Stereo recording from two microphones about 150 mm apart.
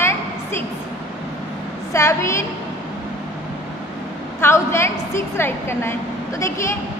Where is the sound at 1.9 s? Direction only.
20° left (ahead or behind).